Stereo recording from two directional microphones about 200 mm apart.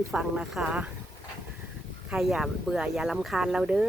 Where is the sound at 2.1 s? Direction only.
Centre (ahead or behind).